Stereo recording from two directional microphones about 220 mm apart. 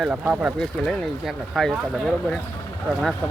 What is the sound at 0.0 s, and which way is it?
Speech, 5° right (ahead or behind).